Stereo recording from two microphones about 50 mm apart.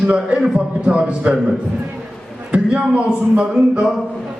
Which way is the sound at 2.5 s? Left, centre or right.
Right.